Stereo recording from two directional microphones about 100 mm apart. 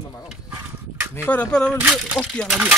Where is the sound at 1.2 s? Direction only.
10° left (ahead or behind).